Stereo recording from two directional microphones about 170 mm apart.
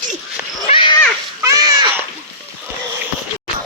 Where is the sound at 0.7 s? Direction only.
30° left (ahead or behind).